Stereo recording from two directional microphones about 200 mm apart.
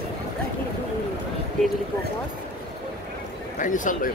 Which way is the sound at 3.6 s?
40° left (ahead or behind).